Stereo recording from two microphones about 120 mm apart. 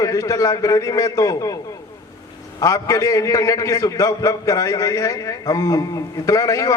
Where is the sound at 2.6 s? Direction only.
30° left (ahead or behind).